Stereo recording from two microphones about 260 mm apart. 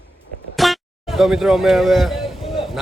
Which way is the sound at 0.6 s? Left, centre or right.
Centre.